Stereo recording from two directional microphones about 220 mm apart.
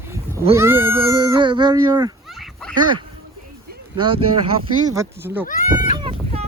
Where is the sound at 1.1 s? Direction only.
20° right (ahead or behind).